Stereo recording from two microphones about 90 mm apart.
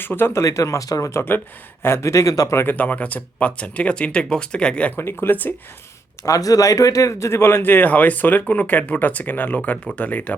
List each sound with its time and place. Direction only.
0.0 s speech: 25° left (ahead or behind)
0.4 s speech: 35° left (ahead or behind)
2.7 s speech: 15° left (ahead or behind)
6.2 s speech: 40° left (ahead or behind); by 10.3 s 20° left (ahead or behind)